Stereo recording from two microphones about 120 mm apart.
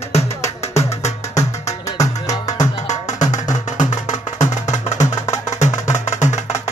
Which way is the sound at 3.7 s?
90° left.